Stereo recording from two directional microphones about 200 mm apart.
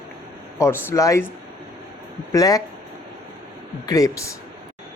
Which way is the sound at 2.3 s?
15° left (ahead or behind).